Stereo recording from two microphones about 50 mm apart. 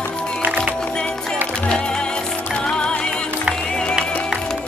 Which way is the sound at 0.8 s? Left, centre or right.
Centre.